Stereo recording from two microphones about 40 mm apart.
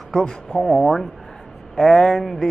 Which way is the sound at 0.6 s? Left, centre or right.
Centre.